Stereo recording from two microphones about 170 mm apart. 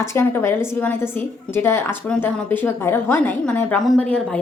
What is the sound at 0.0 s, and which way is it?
A woman's voice, 15° left (ahead or behind).